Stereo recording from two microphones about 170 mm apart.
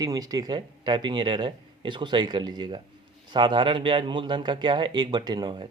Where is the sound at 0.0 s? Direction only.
20° right (ahead or behind).